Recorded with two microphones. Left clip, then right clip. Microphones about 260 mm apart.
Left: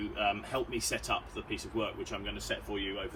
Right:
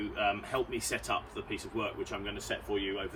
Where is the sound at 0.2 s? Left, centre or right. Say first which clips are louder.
Right 1 dB; right.